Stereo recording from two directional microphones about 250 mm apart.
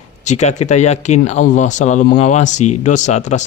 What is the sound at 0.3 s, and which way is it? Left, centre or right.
Speech, left.